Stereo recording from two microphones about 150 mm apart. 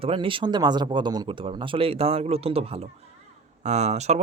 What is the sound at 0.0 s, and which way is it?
Speech, 35° right (ahead or behind).